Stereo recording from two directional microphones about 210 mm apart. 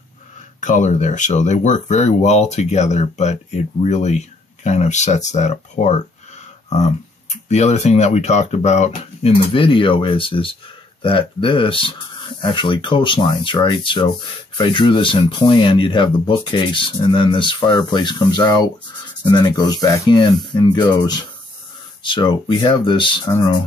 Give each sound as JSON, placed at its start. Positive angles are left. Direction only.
{"t": 0.6, "sound": "speech", "side_deg": 35}